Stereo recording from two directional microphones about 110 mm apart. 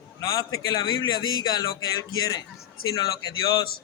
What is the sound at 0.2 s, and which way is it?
A man's voice, 35° left (ahead or behind).